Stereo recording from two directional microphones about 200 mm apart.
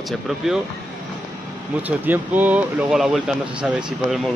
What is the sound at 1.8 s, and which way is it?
Speech, 10° right (ahead or behind).